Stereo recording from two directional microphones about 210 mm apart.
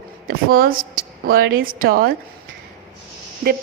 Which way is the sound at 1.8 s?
45° right (ahead or behind).